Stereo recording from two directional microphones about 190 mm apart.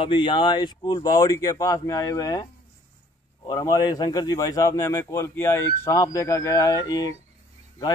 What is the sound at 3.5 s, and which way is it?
Speech, 20° left (ahead or behind).